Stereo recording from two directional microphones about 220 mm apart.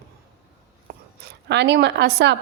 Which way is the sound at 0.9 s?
45° right (ahead or behind).